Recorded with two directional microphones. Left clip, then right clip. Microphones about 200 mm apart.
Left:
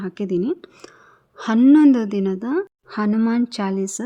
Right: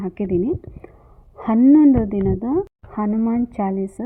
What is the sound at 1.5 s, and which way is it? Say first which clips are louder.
Speech: even; 20° left (ahead or behind).